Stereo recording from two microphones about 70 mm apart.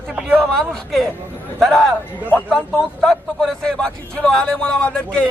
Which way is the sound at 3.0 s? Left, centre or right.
Centre.